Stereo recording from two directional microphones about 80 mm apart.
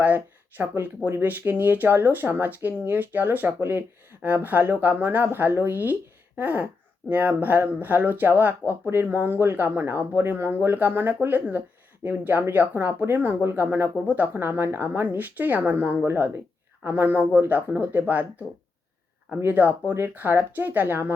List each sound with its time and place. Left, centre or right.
0.0 s speech: right